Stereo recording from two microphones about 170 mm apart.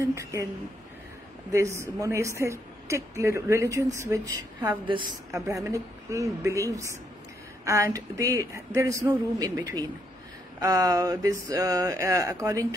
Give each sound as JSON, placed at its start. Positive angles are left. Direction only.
{"t": 0.0, "sound": "a woman's voice", "side_deg": -20}
{"t": 1.5, "sound": "a woman's voice", "side_deg": -15}
{"t": 4.8, "sound": "speech", "side_deg": -30}